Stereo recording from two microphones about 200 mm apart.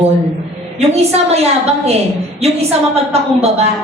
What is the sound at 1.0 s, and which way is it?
Speech, 30° right (ahead or behind).